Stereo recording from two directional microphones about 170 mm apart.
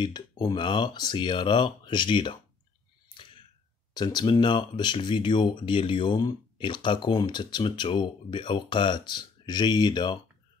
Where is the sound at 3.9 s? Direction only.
25° left (ahead or behind).